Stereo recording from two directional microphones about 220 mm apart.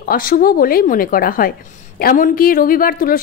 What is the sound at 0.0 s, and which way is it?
A woman's voice, 40° left (ahead or behind).